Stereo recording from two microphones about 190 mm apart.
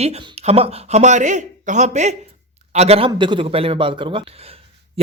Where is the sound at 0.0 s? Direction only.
35° right (ahead or behind).